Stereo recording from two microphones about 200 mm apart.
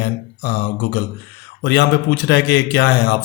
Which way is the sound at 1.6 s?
55° left (ahead or behind).